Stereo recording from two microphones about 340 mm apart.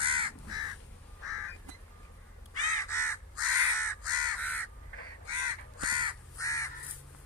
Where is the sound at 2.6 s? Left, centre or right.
Centre.